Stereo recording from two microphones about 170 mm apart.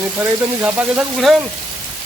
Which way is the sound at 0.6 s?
10° right (ahead or behind).